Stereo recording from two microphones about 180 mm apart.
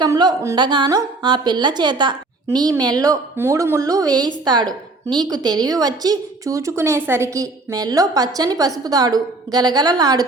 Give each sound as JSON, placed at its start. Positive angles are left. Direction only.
{"t": 0.0, "sound": "a woman's voice", "side_deg": -25}